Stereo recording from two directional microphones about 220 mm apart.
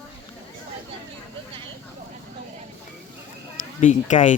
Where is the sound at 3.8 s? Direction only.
35° left (ahead or behind).